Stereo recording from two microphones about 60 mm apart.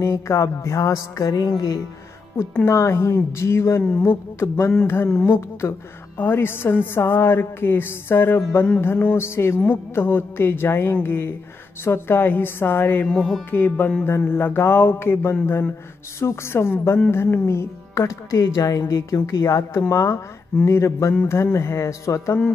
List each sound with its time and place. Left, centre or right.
0.0 s speech: left
2.6 s a woman's voice: left